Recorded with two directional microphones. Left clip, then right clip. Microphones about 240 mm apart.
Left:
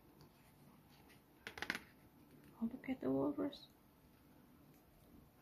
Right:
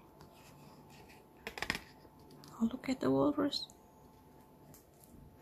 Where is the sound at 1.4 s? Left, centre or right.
Centre.